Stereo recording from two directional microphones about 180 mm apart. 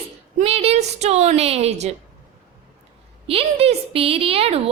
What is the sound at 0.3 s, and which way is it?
A woman's voice, 35° right (ahead or behind).